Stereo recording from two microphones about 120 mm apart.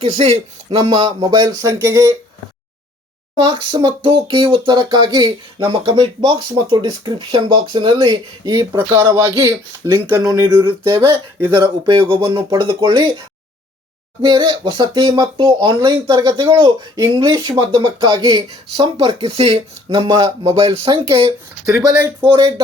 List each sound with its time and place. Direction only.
0.0 s a man's voice: 55° right (ahead or behind)
1.2 s speech: 35° right (ahead or behind)
1.8 s speech: 25° right (ahead or behind)
3.3 s speech: 35° right (ahead or behind)
10.7 s speech: 45° right (ahead or behind)
14.2 s speech: 40° right (ahead or behind)
21.7 s speech: 30° right (ahead or behind)
22.2 s speech: 45° right (ahead or behind)